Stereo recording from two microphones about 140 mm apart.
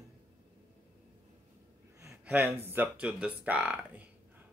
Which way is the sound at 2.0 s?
20° right (ahead or behind).